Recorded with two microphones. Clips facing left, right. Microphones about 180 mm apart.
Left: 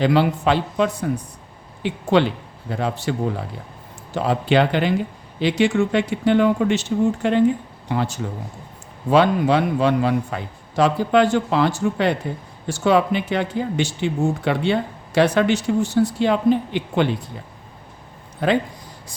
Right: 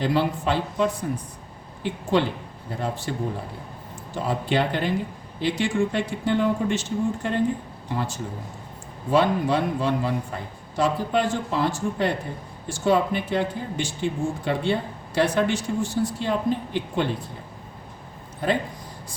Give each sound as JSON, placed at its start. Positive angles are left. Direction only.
{"t": 0.0, "sound": "speech", "side_deg": 85}
{"t": 7.9, "sound": "speech", "side_deg": 80}